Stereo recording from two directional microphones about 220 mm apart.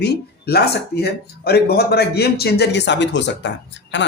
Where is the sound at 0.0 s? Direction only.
45° left (ahead or behind).